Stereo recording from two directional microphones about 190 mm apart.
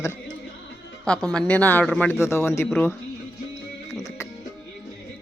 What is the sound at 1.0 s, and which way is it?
Speech, 5° left (ahead or behind).